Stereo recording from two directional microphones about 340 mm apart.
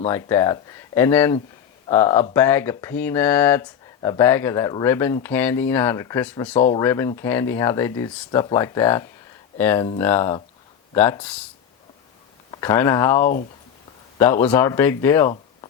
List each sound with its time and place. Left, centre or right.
0.1 s speech: centre
12.5 s speech: centre